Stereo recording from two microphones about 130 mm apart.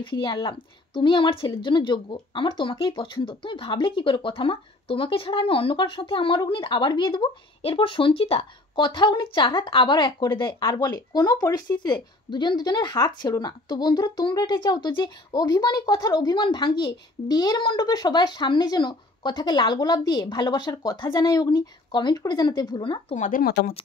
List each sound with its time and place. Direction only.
0.0 s speech: 40° left (ahead or behind)
23.1 s speech: 75° left (ahead or behind)